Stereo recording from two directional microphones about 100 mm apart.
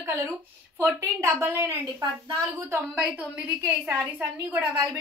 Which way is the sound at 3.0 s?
15° right (ahead or behind).